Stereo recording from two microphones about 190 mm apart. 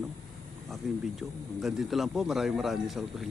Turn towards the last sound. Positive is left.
turn(degrees=0)  # may be behind; listen again after turning